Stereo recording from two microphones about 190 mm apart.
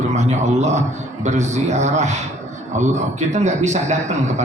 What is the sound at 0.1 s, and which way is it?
A man's voice, 35° right (ahead or behind).